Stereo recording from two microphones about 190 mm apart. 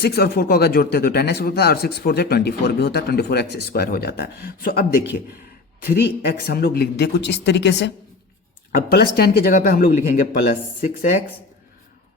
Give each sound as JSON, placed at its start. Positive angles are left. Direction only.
{"t": 0.0, "sound": "speech", "side_deg": 55}
{"t": 8.7, "sound": "speech", "side_deg": 55}